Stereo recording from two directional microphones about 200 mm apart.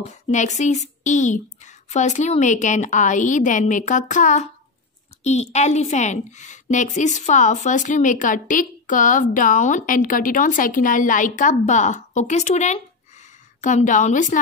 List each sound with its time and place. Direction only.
0.0 s a woman's voice: 35° left (ahead or behind)